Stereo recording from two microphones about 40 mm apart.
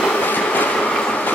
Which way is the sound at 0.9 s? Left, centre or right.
Left.